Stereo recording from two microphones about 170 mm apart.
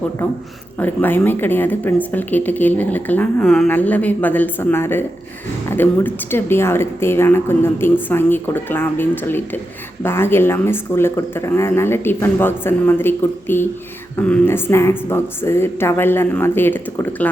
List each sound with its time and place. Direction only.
0.8 s speech: 10° left (ahead or behind)